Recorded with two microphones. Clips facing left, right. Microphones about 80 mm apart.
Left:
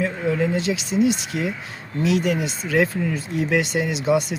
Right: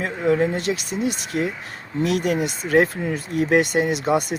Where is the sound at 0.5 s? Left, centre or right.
Right.